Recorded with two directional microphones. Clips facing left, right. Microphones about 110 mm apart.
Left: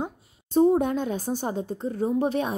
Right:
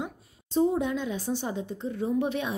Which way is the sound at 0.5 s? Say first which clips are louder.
Left 5 dB; 50° left (ahead or behind).